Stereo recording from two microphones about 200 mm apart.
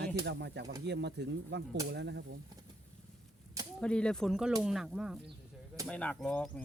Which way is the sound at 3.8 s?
5° left (ahead or behind).